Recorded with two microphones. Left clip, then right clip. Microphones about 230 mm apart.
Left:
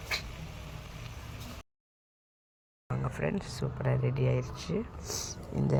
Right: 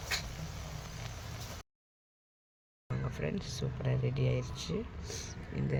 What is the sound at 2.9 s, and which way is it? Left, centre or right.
Speech, centre.